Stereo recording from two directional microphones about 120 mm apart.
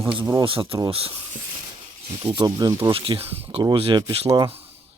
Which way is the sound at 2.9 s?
50° right (ahead or behind).